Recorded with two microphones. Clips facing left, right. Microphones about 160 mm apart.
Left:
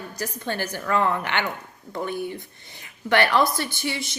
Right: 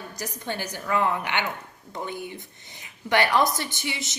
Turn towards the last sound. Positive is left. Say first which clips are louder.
# left 4 dB
turn(degrees=-20)  # may be behind; listen again after turning